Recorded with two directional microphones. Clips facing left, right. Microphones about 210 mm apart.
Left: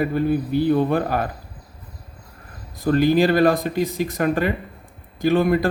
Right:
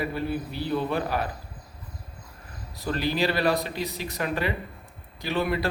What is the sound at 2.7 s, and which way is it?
A man's voice, 50° left (ahead or behind).